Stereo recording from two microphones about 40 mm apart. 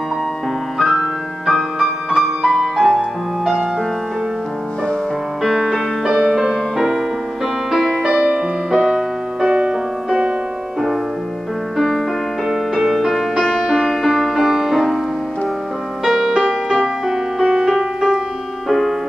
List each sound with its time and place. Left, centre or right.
0.7 s music: centre
5.4 s music: centre; by 10.3 s right
12.4 s music: centre
16.0 s music: centre
18.7 s music: centre